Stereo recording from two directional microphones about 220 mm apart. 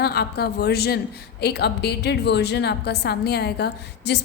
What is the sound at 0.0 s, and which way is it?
A woman's voice, 45° left (ahead or behind).